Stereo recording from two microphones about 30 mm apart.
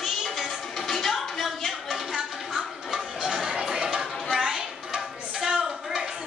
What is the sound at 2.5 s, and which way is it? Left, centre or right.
Music, right.